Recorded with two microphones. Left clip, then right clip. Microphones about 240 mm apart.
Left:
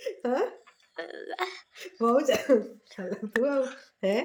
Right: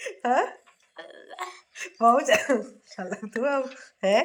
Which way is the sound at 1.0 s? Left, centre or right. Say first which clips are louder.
Left 4 dB; centre.